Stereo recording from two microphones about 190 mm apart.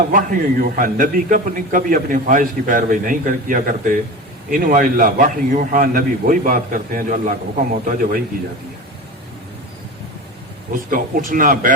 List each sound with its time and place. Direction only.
0.1 s a man's voice: 45° right (ahead or behind)
10.9 s a man's voice: 45° right (ahead or behind)